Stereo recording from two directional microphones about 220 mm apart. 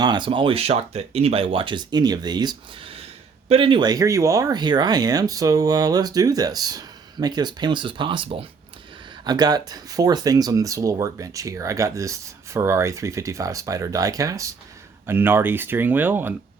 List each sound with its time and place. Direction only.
0.0 s speech: 20° right (ahead or behind)